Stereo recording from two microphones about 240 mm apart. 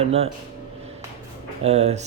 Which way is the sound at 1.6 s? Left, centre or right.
Right.